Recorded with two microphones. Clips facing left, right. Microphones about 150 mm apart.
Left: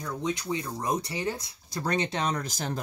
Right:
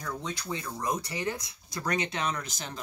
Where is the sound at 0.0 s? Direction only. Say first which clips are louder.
Left 5 dB; 15° left (ahead or behind).